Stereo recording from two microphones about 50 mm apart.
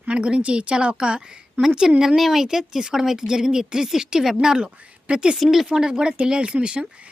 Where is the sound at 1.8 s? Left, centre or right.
Centre.